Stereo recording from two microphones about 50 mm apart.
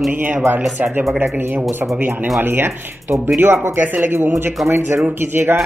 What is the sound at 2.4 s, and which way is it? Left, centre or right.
Speech, right.